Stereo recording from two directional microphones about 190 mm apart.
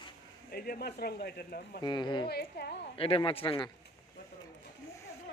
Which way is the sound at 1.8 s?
25° left (ahead or behind).